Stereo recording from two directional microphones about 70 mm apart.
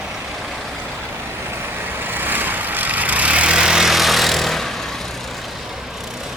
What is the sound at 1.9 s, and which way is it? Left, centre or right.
Vehicle, right.